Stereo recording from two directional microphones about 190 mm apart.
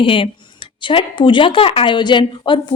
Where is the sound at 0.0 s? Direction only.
30° left (ahead or behind).